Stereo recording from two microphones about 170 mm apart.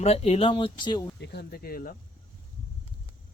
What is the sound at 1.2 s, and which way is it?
Speech, 70° left (ahead or behind).